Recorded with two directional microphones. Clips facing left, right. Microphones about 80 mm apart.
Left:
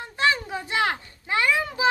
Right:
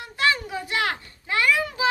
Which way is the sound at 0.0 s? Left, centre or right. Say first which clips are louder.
Even; left.